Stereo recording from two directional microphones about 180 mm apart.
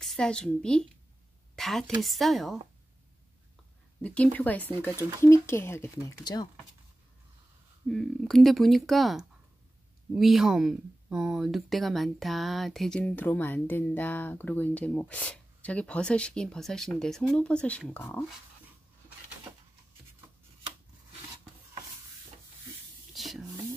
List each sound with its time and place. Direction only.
0.0 s a woman's voice: centre (ahead or behind)
4.0 s speech: 5° left (ahead or behind); by 6.5 s 25° left (ahead or behind)
7.9 s speech: centre (ahead or behind)
23.1 s a sound: centre (ahead or behind)